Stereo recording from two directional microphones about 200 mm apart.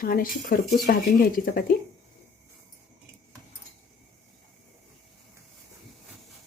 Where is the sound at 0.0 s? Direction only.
45° left (ahead or behind).